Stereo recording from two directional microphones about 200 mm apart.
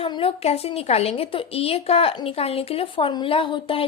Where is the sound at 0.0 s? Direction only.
25° left (ahead or behind).